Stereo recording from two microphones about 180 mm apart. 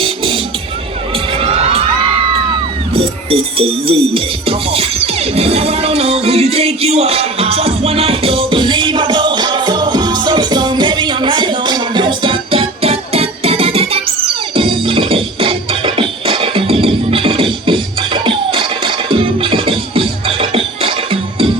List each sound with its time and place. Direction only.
1.4 s children shouting: 35° right (ahead or behind)
3.2 s music: 30° right (ahead or behind)